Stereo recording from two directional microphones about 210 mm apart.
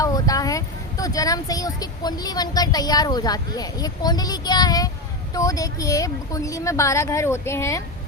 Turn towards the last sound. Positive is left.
turn(degrees=15)  # may be behind; listen again after turning